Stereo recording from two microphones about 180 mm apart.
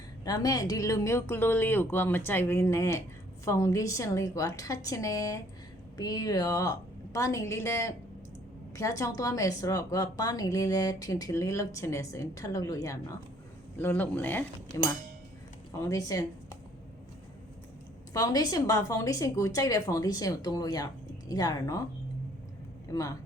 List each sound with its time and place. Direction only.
0.3 s speech: 20° left (ahead or behind)
15.7 s speech: 15° left (ahead or behind)
18.1 s speech: 20° left (ahead or behind)
22.9 s speech: 20° left (ahead or behind)